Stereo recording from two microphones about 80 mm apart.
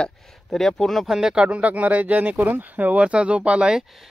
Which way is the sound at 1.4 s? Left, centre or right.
Centre.